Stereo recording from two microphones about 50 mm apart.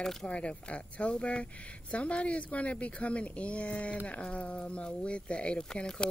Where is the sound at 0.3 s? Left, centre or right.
Left.